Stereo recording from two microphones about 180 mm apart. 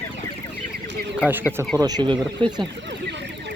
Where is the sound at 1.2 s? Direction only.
10° right (ahead or behind).